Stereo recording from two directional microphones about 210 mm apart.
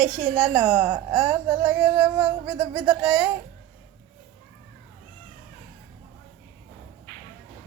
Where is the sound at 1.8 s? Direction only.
20° right (ahead or behind).